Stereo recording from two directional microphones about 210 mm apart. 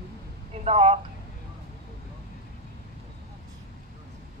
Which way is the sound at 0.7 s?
30° right (ahead or behind).